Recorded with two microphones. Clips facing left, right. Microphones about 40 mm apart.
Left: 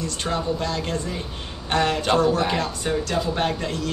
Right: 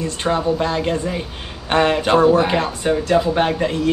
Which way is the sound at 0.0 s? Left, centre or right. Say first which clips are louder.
Right 6 dB; right.